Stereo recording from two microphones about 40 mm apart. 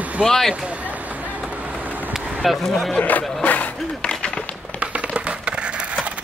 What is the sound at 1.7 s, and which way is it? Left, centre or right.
Vehicle, right.